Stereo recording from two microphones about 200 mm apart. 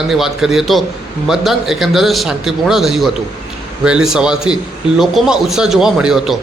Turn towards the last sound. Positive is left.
turn(degrees=0)  # may be behind; listen again after turning